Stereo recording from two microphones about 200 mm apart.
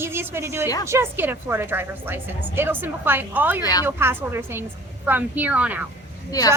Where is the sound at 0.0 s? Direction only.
10° right (ahead or behind).